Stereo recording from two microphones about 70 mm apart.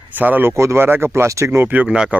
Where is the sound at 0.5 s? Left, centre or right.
Right.